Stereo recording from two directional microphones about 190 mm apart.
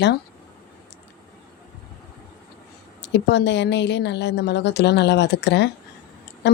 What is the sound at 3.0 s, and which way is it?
A woman's voice, 65° left (ahead or behind).